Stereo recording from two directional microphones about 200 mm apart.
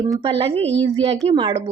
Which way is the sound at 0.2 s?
25° right (ahead or behind).